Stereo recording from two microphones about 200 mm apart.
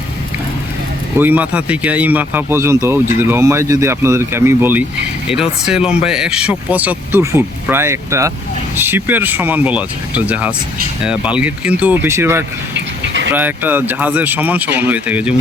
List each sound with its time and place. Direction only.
1.2 s speech: 10° right (ahead or behind)
12.7 s a sound: 65° right (ahead or behind)
13.3 s speech: 10° right (ahead or behind)